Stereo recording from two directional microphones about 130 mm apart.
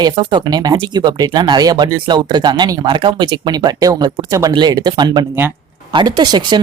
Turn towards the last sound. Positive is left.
turn(degrees=-35)  # may be behind; listen again after turning